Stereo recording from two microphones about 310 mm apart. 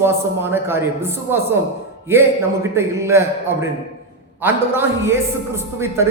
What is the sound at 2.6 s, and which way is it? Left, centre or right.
A man's voice, centre.